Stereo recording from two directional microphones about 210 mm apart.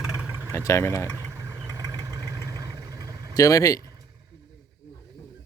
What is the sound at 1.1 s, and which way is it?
Vehicle, 15° right (ahead or behind).